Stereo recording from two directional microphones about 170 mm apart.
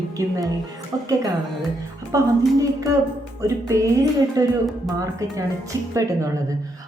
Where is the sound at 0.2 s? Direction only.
20° right (ahead or behind).